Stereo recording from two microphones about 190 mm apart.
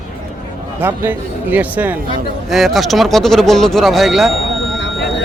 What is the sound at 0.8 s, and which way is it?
A man's voice, 10° right (ahead or behind).